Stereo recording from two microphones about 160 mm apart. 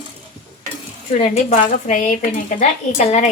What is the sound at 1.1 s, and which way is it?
Speech, 40° left (ahead or behind).